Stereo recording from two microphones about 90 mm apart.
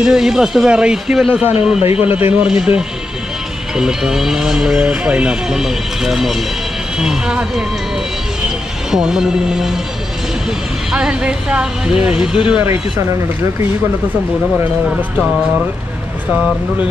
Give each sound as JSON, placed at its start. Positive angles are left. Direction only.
{"t": 0.0, "sound": "a man's voice", "side_deg": -5}
{"t": 1.9, "sound": "a man's voice", "side_deg": 90}
{"t": 2.3, "sound": "a man's voice", "side_deg": -10}
{"t": 8.9, "sound": "speech", "side_deg": -5}
{"t": 10.9, "sound": "a man's voice", "side_deg": -10}